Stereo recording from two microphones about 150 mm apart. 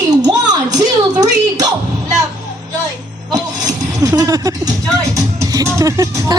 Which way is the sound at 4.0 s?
20° right (ahead or behind).